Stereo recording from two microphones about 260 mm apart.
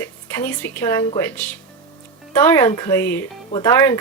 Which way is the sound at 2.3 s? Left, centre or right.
Centre.